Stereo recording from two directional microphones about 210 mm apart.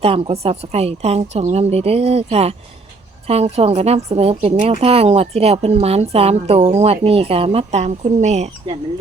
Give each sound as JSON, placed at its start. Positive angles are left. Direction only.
{"t": 0.0, "sound": "a woman's voice", "side_deg": -30}